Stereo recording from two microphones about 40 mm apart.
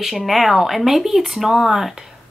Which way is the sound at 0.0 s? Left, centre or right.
Centre.